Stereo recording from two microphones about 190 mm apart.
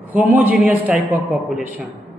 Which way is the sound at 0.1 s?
10° right (ahead or behind).